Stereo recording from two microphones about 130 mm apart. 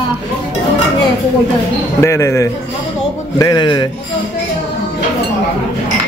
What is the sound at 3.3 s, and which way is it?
Speech, 30° left (ahead or behind).